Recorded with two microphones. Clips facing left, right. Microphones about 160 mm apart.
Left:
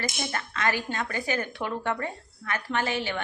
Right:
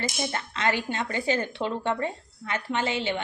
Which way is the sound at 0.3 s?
25° right (ahead or behind).